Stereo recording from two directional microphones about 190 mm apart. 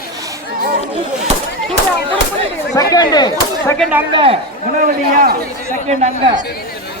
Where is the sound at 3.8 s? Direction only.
5° right (ahead or behind).